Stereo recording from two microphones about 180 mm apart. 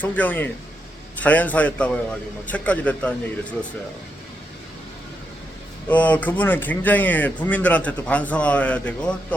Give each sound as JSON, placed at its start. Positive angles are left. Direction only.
{"t": 0.0, "sound": "speech", "side_deg": 10}
{"t": 5.9, "sound": "speech", "side_deg": 10}